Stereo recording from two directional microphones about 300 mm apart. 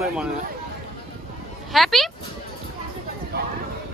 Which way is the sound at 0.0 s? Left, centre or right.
Centre.